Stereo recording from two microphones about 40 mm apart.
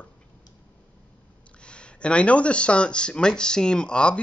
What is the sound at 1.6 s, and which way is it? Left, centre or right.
Speech, left.